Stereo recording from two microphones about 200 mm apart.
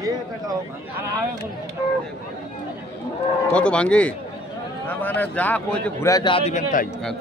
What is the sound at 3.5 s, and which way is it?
Cattle, 5° left (ahead or behind).